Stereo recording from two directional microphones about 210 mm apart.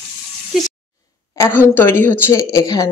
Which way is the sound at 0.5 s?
Centre (ahead or behind).